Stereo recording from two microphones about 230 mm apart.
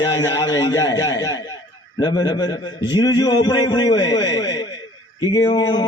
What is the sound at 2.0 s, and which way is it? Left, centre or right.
A man's voice, centre.